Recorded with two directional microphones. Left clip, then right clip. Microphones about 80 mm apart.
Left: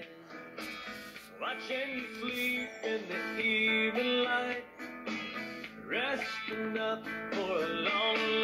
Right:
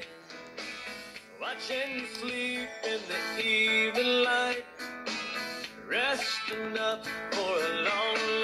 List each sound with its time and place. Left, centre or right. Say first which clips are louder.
1.4 s music: right 2 dB; right